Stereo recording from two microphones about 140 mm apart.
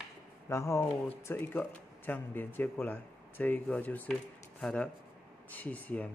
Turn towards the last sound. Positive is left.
turn(degrees=10)  # may be behind; listen again after turning